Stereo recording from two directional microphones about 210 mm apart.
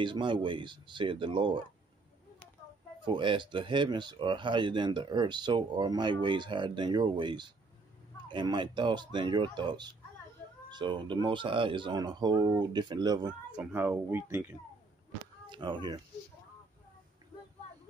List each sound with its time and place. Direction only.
0.0 s speech: 20° right (ahead or behind)
3.1 s speech: 20° right (ahead or behind)
13.6 s speech: 10° right (ahead or behind)
15.5 s speech: 20° right (ahead or behind)